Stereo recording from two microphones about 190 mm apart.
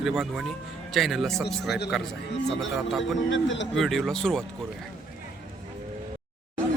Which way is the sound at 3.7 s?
Centre (ahead or behind).